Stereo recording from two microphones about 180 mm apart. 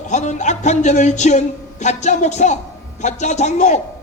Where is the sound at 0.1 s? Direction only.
40° left (ahead or behind).